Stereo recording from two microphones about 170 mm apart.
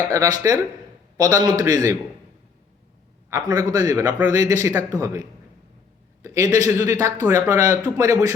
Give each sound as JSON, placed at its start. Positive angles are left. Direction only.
{"t": 0.1, "sound": "a man's voice", "side_deg": -20}
{"t": 3.2, "sound": "a man's voice", "side_deg": -20}